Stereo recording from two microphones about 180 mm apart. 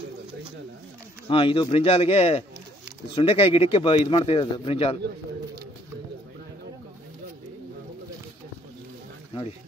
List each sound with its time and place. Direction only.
1.3 s a man's voice: 30° left (ahead or behind)